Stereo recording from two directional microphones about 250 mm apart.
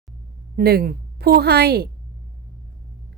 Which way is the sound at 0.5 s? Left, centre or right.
Right.